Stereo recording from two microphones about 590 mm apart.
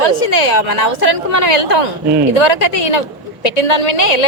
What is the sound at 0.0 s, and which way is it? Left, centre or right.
Speech, left.